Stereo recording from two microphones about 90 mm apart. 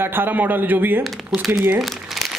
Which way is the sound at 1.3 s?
5° right (ahead or behind).